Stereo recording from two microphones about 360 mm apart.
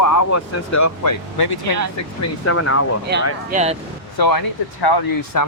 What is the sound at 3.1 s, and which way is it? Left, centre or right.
Speech, right.